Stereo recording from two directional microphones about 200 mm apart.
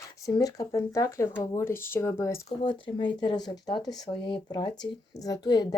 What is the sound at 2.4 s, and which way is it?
Speech, 25° left (ahead or behind).